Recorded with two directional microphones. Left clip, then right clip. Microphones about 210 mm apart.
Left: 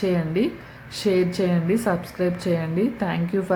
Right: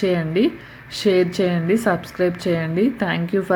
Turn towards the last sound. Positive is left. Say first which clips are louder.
# right 4 dB
turn(degrees=-15)  # may be behind; listen again after turning